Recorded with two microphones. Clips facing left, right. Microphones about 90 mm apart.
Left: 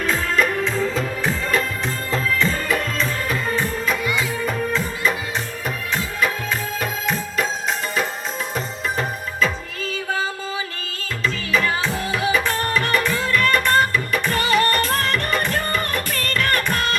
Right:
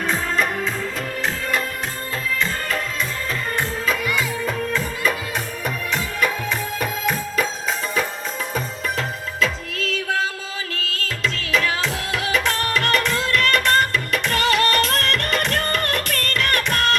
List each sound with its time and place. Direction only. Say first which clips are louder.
9.0 s music: left 1 dB; 90° right; by 16.8 s 70° right (ahead or behind)